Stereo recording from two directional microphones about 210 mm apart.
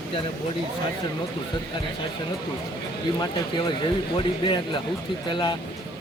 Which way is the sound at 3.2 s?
20° left (ahead or behind).